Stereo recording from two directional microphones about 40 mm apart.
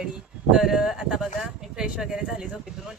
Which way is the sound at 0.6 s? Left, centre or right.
Centre.